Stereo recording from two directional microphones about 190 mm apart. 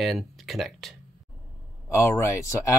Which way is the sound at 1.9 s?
15° left (ahead or behind).